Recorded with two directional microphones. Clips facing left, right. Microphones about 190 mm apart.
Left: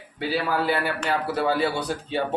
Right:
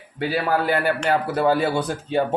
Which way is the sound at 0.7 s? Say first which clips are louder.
Right 4 dB; 50° right (ahead or behind).